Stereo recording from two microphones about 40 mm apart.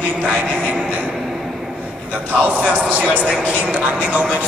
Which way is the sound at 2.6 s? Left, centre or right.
Right.